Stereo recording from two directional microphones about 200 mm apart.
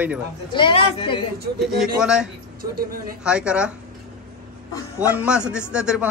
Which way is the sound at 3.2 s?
5° right (ahead or behind).